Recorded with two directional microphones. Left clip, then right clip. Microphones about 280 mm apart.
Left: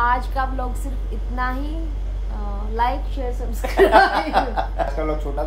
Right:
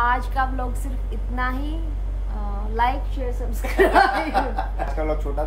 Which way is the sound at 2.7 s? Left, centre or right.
Centre.